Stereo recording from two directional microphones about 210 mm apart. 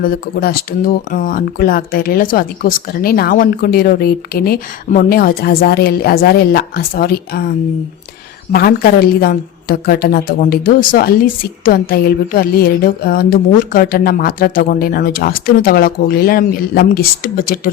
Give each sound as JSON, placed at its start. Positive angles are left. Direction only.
{"t": 0.0, "sound": "speech", "side_deg": 45}
{"t": 8.5, "sound": "speech", "side_deg": 45}